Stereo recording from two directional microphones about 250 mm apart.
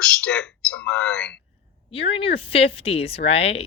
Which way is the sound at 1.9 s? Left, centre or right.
Left.